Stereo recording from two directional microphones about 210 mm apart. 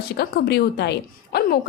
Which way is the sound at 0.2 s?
50° left (ahead or behind).